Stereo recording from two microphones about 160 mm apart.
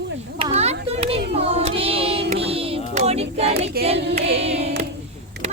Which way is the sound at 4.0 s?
90° right.